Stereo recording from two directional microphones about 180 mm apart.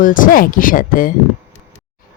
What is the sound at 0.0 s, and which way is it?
Speech, 50° left (ahead or behind).